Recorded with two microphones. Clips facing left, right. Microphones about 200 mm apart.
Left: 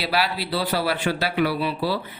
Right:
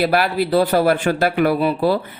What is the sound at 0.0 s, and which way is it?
Speech, 50° right (ahead or behind).